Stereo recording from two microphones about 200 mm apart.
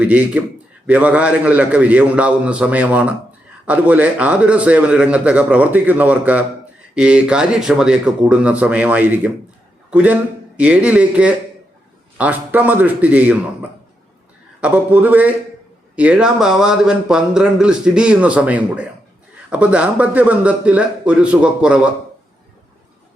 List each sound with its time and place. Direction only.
0.0 s a man's voice: 5° right (ahead or behind)